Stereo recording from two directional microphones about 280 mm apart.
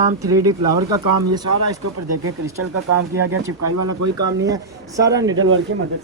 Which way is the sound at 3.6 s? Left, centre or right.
Right.